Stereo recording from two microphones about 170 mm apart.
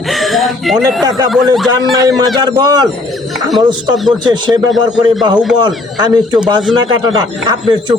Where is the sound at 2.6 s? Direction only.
25° right (ahead or behind).